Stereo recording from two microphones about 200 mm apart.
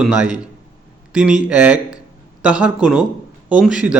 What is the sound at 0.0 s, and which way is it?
A man's voice, 5° right (ahead or behind).